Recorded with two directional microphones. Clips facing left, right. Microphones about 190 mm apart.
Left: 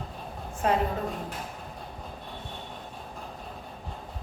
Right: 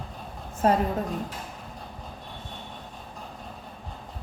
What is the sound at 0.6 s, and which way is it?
Speech, 40° right (ahead or behind).